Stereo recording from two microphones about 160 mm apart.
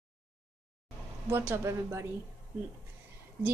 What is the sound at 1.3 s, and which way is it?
Speech, 15° right (ahead or behind).